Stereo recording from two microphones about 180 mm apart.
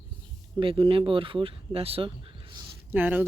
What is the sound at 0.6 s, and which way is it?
Speech, 30° right (ahead or behind).